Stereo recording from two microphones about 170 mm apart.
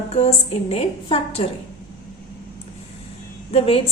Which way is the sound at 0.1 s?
40° left (ahead or behind).